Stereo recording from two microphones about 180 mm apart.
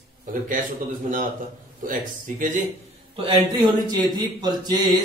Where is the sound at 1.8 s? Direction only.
45° right (ahead or behind).